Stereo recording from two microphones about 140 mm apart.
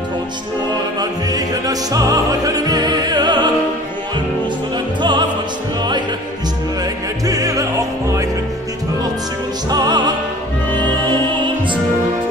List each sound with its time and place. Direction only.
0.9 s opera: 25° right (ahead or behind)
7.2 s opera: 25° right (ahead or behind)
9.7 s music: 30° right (ahead or behind)